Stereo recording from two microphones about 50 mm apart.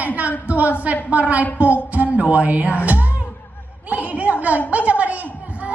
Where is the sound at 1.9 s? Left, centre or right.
Right.